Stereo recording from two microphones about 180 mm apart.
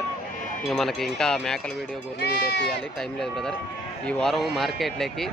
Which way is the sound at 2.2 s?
65° left (ahead or behind).